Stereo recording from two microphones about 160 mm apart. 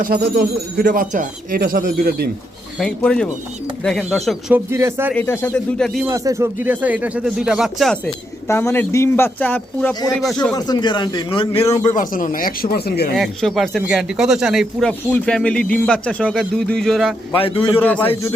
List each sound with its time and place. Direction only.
0.0 s speech: 65° right (ahead or behind)
2.7 s speech: 5° left (ahead or behind)
4.5 s speech: 15° right (ahead or behind)
5.1 s a man's voice: 15° left (ahead or behind)
6.1 s speech: 20° right (ahead or behind); by 8.1 s centre (ahead or behind)
8.4 s a man's voice: 15° left (ahead or behind)
9.9 s a man's voice: 25° left (ahead or behind)
11.9 s speech: 55° left (ahead or behind); by 13.1 s 75° left (ahead or behind)
13.1 s speech: centre (ahead or behind)
17.3 s a man's voice: 35° left (ahead or behind)
17.7 s a man's voice: 10° left (ahead or behind)